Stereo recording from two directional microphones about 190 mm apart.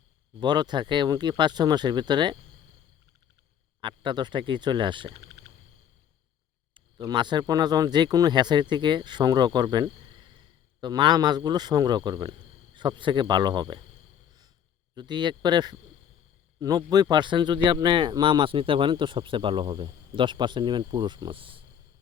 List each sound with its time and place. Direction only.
0.3 s speech: 20° right (ahead or behind)
3.8 s speech: 25° right (ahead or behind)
5.2 s a sound: 60° right (ahead or behind)
6.7 s speech: 25° right (ahead or behind)
14.9 s speech: 25° right (ahead or behind)